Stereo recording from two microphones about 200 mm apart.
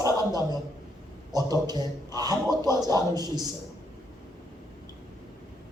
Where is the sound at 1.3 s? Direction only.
20° right (ahead or behind).